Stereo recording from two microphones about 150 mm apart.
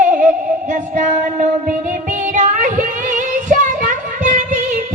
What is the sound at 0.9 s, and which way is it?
Child singing, 55° right (ahead or behind).